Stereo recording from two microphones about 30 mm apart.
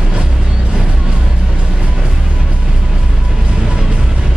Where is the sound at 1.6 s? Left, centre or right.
Right.